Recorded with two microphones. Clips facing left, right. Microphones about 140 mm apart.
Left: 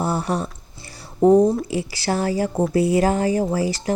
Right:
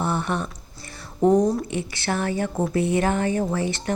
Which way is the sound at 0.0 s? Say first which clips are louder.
Left 2 dB; 35° left (ahead or behind).